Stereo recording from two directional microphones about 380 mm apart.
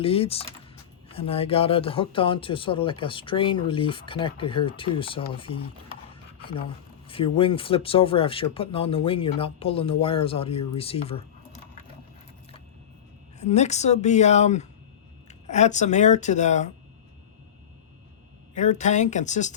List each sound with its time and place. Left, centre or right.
0.0 s speech: centre
7.1 s speech: centre
13.4 s speech: centre
18.5 s speech: centre